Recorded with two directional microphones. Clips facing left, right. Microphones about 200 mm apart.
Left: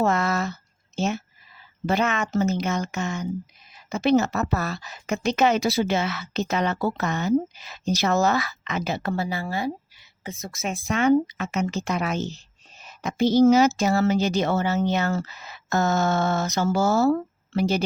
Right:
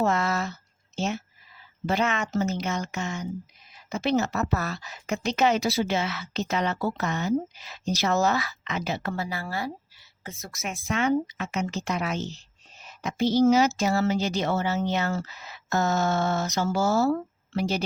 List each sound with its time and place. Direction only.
0.0 s a woman's voice: 50° left (ahead or behind)
1.9 s a woman's voice: 50° left (ahead or behind)
4.4 s speech: 35° left (ahead or behind)
5.1 s a woman's voice: 55° left (ahead or behind)
9.1 s speech: 25° left (ahead or behind)
11.0 s a woman's voice: 50° left (ahead or behind)